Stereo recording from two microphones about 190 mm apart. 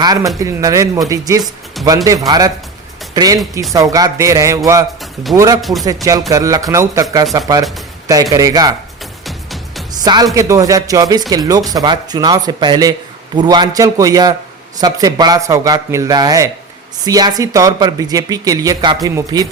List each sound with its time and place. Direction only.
0.0 s speech: 20° right (ahead or behind)
1.8 s speech: centre (ahead or behind)
2.2 s speech: 20° right (ahead or behind)
9.2 s music: centre (ahead or behind)
9.9 s speech: 20° right (ahead or behind)